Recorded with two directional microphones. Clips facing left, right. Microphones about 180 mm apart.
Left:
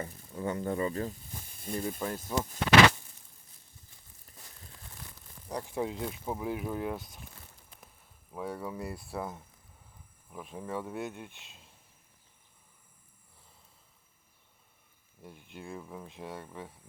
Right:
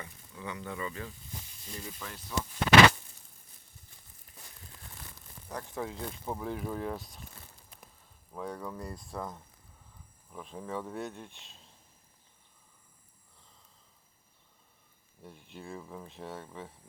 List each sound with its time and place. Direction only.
0.0 s speech: 45° left (ahead or behind)
5.5 s speech: 15° left (ahead or behind)
8.3 s speech: 5° left (ahead or behind)
15.2 s speech: 5° left (ahead or behind)